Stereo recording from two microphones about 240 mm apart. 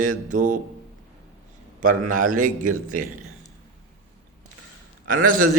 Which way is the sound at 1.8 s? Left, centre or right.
Right.